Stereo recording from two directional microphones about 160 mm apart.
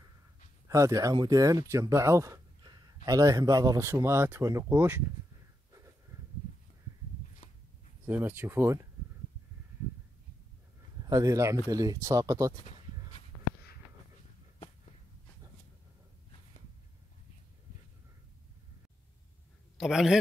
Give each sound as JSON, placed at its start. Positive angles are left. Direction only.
{"t": 0.7, "sound": "speech", "side_deg": -20}
{"t": 8.0, "sound": "speech", "side_deg": -15}
{"t": 11.1, "sound": "speech", "side_deg": -20}
{"t": 19.8, "sound": "a man's voice", "side_deg": -5}